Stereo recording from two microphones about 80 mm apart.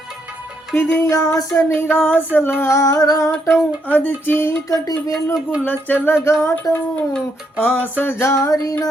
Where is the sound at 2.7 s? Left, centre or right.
Left.